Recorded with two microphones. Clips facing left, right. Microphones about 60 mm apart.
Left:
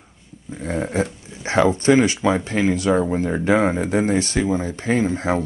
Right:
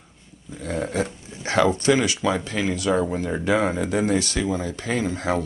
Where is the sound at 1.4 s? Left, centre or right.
Left.